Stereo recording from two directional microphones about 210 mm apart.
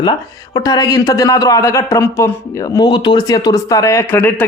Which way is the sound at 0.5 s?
20° left (ahead or behind).